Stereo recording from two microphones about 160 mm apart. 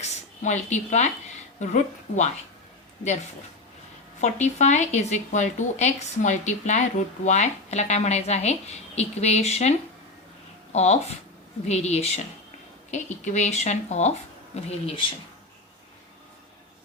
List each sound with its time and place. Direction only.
0.0 s a woman's voice: 45° left (ahead or behind)
4.2 s speech: 45° left (ahead or behind)